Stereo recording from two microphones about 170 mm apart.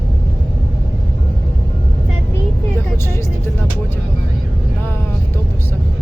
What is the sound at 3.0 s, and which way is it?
Vehicle, 15° left (ahead or behind).